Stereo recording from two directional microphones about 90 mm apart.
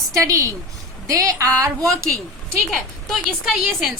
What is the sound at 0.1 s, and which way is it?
A woman's voice, 35° right (ahead or behind).